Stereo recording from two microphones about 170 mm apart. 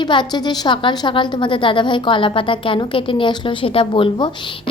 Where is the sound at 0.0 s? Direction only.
25° left (ahead or behind).